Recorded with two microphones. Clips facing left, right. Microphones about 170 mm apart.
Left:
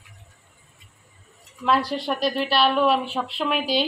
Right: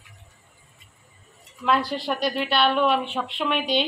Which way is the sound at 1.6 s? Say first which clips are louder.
Left 1 dB; centre (ahead or behind).